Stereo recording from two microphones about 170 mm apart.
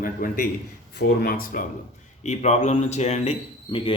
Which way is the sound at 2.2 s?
45° left (ahead or behind).